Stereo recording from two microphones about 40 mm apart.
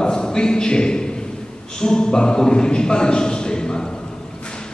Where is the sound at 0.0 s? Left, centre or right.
Centre.